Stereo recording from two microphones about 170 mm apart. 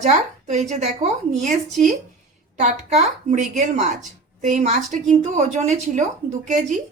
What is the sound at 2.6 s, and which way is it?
A woman's voice, 45° right (ahead or behind).